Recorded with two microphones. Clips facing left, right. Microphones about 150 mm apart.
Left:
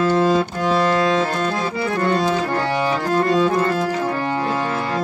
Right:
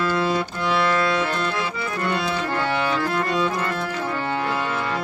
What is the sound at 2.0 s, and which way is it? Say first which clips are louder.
Accordion: left 5 dB; 40° left (ahead or behind).